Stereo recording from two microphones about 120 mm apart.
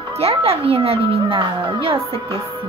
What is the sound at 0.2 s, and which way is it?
A woman's voice, 55° right (ahead or behind).